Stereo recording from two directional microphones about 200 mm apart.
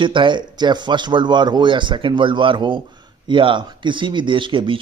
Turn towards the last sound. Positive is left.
turn(degrees=-25)  # may be behind; listen again after turning